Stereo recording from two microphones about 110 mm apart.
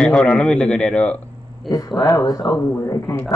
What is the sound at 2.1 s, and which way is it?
Speech, 35° left (ahead or behind).